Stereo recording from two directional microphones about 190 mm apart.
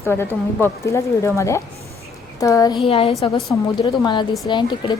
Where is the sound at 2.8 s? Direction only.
30° left (ahead or behind).